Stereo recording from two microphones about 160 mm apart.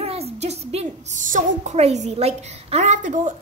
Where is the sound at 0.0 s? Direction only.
40° right (ahead or behind).